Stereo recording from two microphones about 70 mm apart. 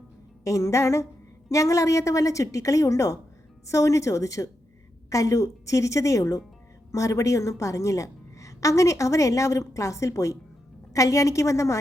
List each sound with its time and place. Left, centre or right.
0.4 s a woman's voice: left